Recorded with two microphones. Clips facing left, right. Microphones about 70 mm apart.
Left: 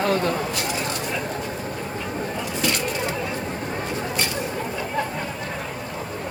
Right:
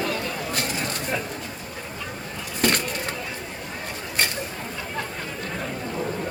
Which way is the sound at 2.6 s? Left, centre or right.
Right.